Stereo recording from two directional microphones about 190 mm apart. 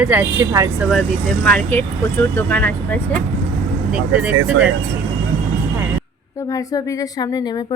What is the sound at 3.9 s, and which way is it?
Speech, 5° right (ahead or behind).